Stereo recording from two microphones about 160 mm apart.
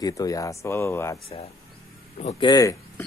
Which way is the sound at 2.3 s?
25° left (ahead or behind).